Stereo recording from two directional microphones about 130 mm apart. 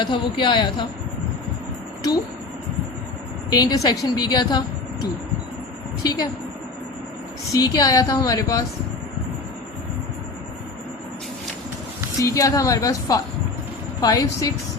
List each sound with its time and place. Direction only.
0.0 s a woman's voice: 35° left (ahead or behind)
3.5 s a woman's voice: 30° left (ahead or behind)
6.0 s a woman's voice: 30° left (ahead or behind)
7.5 s a woman's voice: 25° left (ahead or behind)
12.2 s a woman's voice: 25° left (ahead or behind)